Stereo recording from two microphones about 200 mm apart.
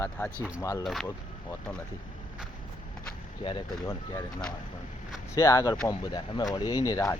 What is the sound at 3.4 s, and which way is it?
Speech, 25° left (ahead or behind).